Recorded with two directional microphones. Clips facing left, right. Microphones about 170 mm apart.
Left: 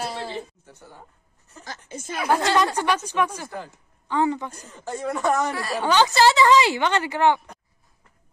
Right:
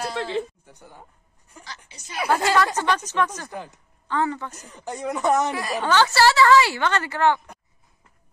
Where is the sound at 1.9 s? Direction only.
50° left (ahead or behind).